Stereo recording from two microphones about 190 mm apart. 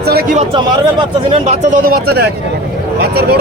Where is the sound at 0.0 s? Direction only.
55° right (ahead or behind).